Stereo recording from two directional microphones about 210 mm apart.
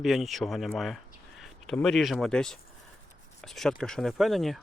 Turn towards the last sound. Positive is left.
turn(degrees=0)  # may be behind; listen again after turning